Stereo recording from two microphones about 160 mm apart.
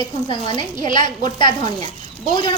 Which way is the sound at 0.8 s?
55° right (ahead or behind).